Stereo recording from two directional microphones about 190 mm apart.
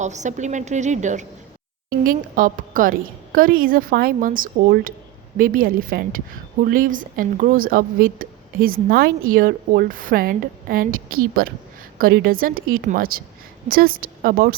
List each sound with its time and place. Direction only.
0.0 s a woman's voice: 40° right (ahead or behind)